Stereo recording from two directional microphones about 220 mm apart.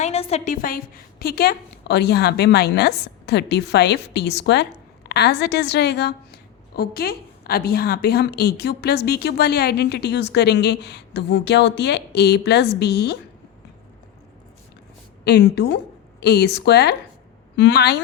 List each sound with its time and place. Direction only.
0.0 s a woman's voice: 30° left (ahead or behind); by 13.1 s 50° left (ahead or behind)
15.2 s a woman's voice: 50° left (ahead or behind)